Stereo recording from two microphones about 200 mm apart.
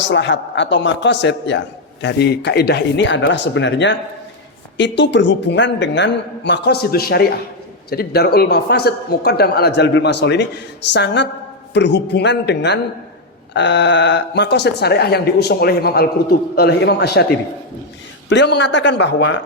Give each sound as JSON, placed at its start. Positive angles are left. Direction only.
{"t": 0.1, "sound": "a man's voice", "side_deg": 65}
{"t": 18.3, "sound": "a man's voice", "side_deg": 60}